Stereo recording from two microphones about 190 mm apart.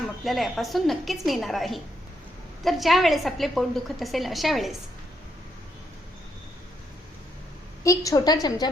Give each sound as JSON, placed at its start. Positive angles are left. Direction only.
{"t": 0.3, "sound": "a woman's voice", "side_deg": 0}
{"t": 7.9, "sound": "a woman's voice", "side_deg": 20}